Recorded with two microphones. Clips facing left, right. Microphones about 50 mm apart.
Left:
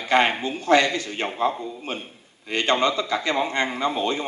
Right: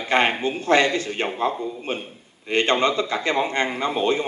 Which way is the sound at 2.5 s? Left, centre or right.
Right.